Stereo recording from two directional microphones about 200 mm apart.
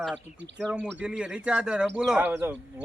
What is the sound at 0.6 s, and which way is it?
Speech, centre (ahead or behind).